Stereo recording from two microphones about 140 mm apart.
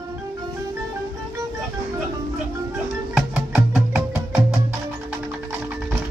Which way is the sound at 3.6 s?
10° right (ahead or behind).